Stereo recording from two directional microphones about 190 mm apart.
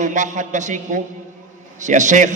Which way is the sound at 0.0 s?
40° right (ahead or behind).